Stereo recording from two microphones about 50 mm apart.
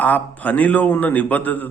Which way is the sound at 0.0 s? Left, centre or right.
Left.